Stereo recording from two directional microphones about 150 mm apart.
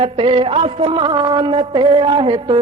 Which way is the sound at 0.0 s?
40° right (ahead or behind).